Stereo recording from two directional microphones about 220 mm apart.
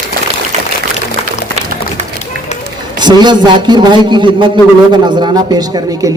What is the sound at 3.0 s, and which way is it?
A man's voice, 20° right (ahead or behind).